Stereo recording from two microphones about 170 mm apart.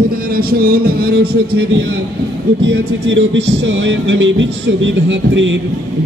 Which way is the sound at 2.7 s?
90° right.